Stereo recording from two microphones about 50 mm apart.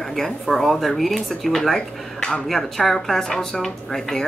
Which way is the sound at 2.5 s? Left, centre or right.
Centre.